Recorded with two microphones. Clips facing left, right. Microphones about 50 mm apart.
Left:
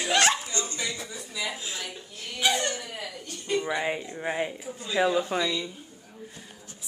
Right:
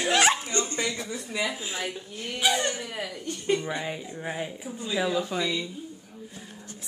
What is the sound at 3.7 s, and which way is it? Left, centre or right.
A woman's voice, left.